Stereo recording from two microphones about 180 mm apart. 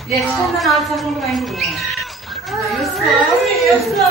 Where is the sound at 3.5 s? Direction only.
Centre (ahead or behind).